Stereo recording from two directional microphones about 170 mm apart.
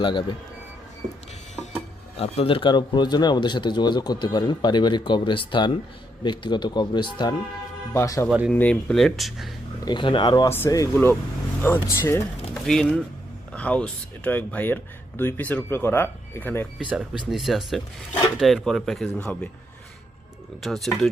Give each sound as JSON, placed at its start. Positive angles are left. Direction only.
{"t": 0.0, "sound": "speech", "side_deg": 30}
{"t": 2.1, "sound": "speech", "side_deg": 35}
{"t": 8.3, "sound": "speech", "side_deg": -5}
{"t": 8.5, "sound": "speech", "side_deg": 10}
{"t": 9.8, "sound": "speech", "side_deg": 30}
{"t": 12.6, "sound": "speech", "side_deg": 5}
{"t": 16.7, "sound": "speech", "side_deg": -5}
{"t": 20.6, "sound": "speech", "side_deg": 0}